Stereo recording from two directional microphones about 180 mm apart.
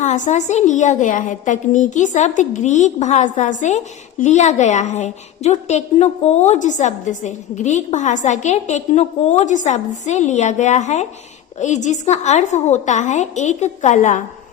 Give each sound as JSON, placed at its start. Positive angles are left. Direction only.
{"t": 0.0, "sound": "a woman's voice", "side_deg": 40}